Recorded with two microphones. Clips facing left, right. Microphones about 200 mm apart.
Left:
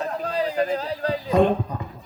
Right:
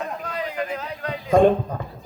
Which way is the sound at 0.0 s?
35° left (ahead or behind).